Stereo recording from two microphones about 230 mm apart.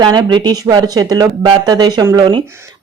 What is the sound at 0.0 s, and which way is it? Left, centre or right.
Speech, centre.